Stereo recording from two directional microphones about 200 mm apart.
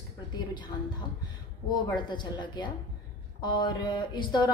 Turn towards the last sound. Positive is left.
turn(degrees=20)  # may be behind; listen again after turning